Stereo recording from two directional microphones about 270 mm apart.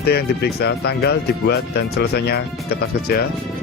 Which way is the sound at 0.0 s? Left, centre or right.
Left.